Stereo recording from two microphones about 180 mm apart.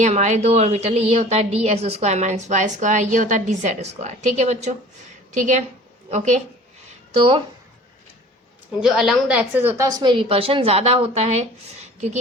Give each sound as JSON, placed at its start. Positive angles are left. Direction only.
{"t": 0.0, "sound": "a woman's voice", "side_deg": -40}
{"t": 8.8, "sound": "a woman's voice", "side_deg": 0}